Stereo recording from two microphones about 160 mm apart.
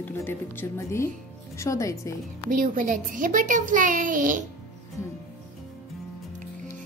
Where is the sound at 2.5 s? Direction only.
60° right (ahead or behind).